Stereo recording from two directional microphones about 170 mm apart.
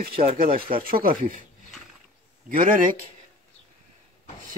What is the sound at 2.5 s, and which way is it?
Speech, 55° right (ahead or behind).